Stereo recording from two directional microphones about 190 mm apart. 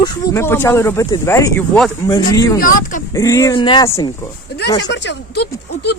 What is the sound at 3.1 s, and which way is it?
Speech, 15° left (ahead or behind).